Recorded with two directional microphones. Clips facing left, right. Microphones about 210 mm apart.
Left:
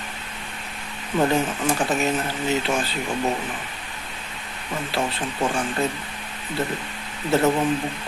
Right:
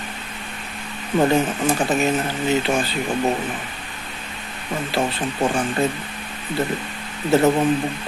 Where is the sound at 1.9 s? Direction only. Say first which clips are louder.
Right 3 dB; centre (ahead or behind).